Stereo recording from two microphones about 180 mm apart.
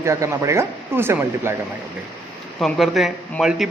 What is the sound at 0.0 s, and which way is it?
Speech, 15° right (ahead or behind).